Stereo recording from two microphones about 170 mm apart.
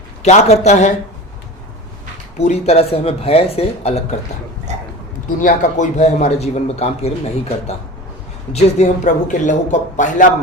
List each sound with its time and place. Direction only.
0.2 s speech: 40° left (ahead or behind)
2.4 s a man's voice: 40° left (ahead or behind)
4.7 s a sound: 45° right (ahead or behind)
5.4 s a man's voice: 50° left (ahead or behind)
8.5 s speech: 40° left (ahead or behind)